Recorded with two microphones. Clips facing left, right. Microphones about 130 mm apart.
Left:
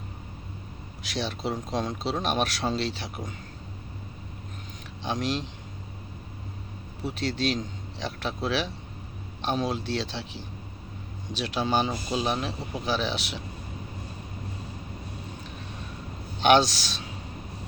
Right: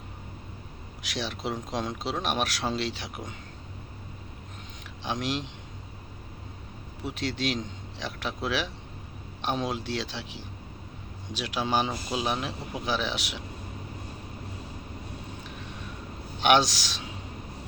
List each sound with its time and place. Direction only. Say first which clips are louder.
1.1 s speech: left 2 dB; 15° right (ahead or behind)
5.0 s speech: left 2 dB; 15° right (ahead or behind)
7.0 s speech: left 2 dB; 15° right (ahead or behind)
16.4 s speech: left 2 dB; 15° right (ahead or behind)